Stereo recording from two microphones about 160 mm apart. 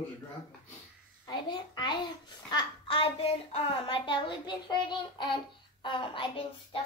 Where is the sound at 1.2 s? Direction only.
25° left (ahead or behind).